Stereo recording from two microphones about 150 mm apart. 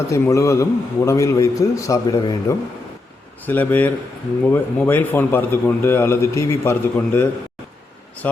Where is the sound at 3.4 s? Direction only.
10° left (ahead or behind).